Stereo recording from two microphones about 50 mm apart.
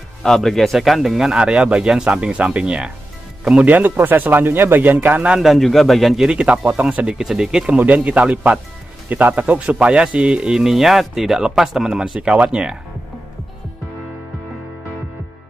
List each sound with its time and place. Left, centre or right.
0.2 s a man's voice: centre
3.6 s speech: right
5.4 s speech: centre
6.3 s speech: right
7.2 s speech: centre
7.7 s speech: right
9.1 s speech: right; by 10.6 s centre
10.6 s speech: centre
12.2 s speech: right